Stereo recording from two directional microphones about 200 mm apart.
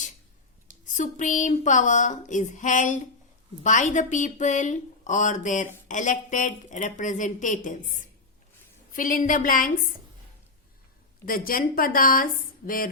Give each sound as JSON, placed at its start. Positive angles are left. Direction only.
{"t": 0.9, "sound": "speech", "side_deg": 40}
{"t": 8.9, "sound": "a woman's voice", "side_deg": 45}
{"t": 11.3, "sound": "a woman's voice", "side_deg": 45}